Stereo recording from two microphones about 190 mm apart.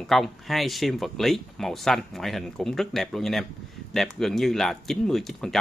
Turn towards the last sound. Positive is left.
turn(degrees=0)  # may be behind; listen again after turning